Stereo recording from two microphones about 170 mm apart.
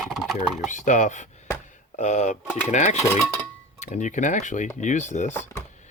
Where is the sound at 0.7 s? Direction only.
45° left (ahead or behind).